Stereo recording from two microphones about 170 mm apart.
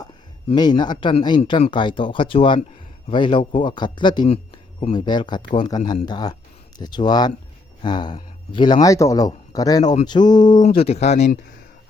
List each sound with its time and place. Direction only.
0.4 s speech: 25° left (ahead or behind)
10.7 s speech: 35° left (ahead or behind)